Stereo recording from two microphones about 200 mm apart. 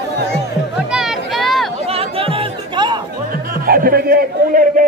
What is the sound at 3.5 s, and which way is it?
Music, 45° right (ahead or behind).